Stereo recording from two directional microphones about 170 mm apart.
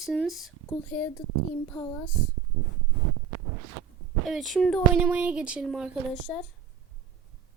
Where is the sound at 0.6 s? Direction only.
15° left (ahead or behind).